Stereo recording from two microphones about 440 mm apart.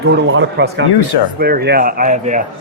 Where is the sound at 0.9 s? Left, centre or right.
Left.